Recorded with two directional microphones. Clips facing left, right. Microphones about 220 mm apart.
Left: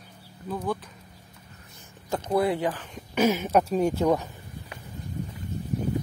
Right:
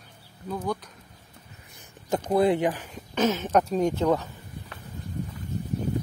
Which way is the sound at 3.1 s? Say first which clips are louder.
Left 1 dB; 10° left (ahead or behind).